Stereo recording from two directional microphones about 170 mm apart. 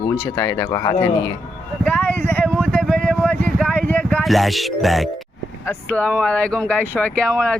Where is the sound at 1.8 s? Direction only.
10° left (ahead or behind).